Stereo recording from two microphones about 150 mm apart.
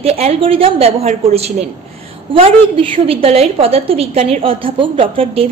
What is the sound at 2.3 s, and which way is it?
A woman's voice, 40° right (ahead or behind).